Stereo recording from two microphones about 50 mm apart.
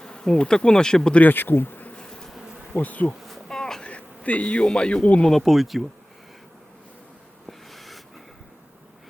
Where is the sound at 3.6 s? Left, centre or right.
Centre.